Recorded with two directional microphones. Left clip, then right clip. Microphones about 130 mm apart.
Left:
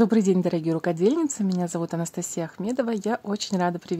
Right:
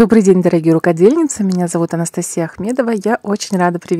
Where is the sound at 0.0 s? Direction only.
55° right (ahead or behind).